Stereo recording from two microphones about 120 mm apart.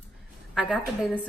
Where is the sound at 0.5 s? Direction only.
5° right (ahead or behind).